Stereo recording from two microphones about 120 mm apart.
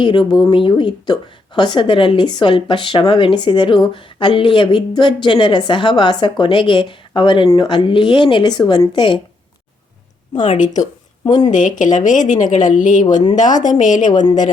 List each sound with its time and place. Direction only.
0.0 s a woman's voice: 45° left (ahead or behind)
10.4 s a woman's voice: 90° left